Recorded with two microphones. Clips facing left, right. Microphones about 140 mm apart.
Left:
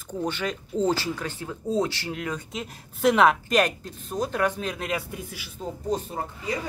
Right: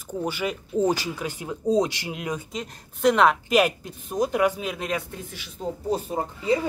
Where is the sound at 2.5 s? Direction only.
Centre (ahead or behind).